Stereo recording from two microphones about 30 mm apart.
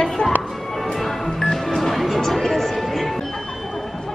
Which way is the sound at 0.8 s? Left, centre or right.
Centre.